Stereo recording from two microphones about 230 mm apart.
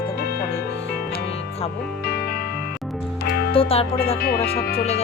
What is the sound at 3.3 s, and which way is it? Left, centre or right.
Music, left.